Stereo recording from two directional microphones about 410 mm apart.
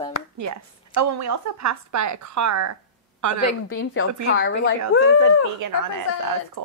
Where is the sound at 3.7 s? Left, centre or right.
Left.